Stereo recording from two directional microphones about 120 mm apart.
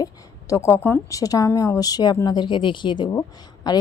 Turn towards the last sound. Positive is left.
turn(degrees=35)  # may be behind; listen again after turning